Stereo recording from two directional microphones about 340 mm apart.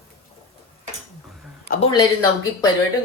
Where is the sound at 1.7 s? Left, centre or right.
Centre.